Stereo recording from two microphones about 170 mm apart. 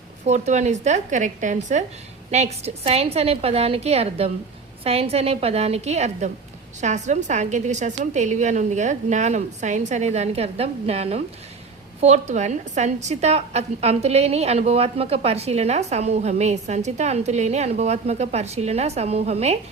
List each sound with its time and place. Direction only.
0.3 s a woman's voice: 40° right (ahead or behind)